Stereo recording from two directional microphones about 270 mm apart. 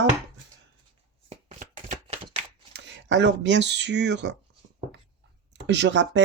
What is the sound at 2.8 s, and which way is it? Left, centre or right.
Speech, right.